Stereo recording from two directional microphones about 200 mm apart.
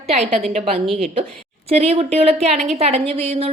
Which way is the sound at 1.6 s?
30° right (ahead or behind).